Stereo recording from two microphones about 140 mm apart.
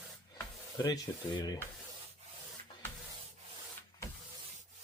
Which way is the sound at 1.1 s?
25° left (ahead or behind).